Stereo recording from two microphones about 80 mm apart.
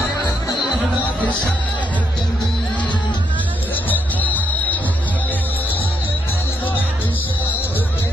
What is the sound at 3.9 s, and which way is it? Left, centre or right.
Music, left.